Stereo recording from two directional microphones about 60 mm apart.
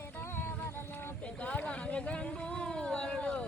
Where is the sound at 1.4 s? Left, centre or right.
Left.